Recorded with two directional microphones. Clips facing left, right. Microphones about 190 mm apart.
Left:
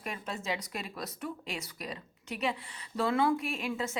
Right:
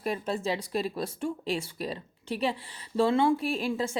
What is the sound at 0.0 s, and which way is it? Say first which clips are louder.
Speech: right 8 dB; 35° right (ahead or behind).